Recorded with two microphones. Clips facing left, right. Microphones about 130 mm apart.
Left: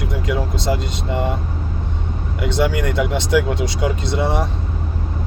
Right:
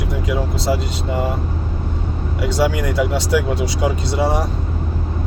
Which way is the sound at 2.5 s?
5° right (ahead or behind).